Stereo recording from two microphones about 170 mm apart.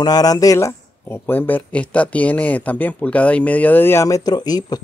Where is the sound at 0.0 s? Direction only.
20° left (ahead or behind).